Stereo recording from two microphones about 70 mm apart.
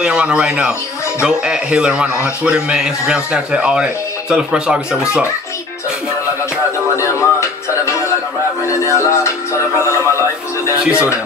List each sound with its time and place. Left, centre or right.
0.0 s a man's voice: centre
7.0 s music: left
10.8 s a man's voice: centre